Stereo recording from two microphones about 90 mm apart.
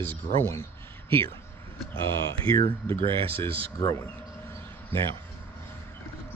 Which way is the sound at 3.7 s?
35° left (ahead or behind).